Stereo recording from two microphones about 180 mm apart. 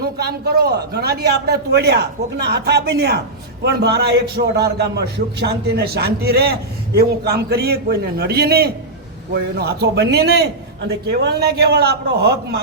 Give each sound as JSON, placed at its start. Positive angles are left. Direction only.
{"t": 0.0, "sound": "a man's voice", "side_deg": -60}